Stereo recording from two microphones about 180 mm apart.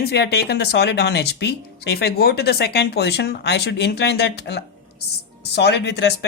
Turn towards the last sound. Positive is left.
turn(degrees=70)  # may be behind; listen again after turning